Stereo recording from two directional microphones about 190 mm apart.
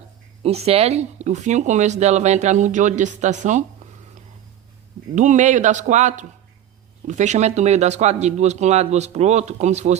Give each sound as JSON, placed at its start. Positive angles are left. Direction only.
{"t": 0.4, "sound": "speech", "side_deg": -35}
{"t": 3.8, "sound": "a sound", "side_deg": -40}
{"t": 5.1, "sound": "speech", "side_deg": -40}